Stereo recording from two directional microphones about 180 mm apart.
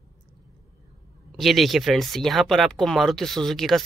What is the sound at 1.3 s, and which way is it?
Speech, centre (ahead or behind).